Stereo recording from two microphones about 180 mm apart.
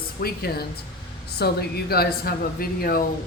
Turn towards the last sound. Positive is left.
turn(degrees=55)  # may be behind; listen again after turning